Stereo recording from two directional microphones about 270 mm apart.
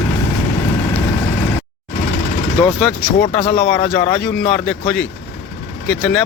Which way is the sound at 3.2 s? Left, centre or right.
Left.